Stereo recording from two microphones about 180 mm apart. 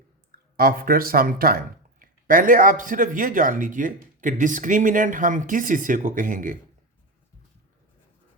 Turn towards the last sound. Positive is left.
turn(degrees=-50)  # may be behind; listen again after turning